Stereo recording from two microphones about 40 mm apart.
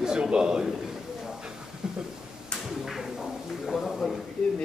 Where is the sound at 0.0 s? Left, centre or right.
Centre.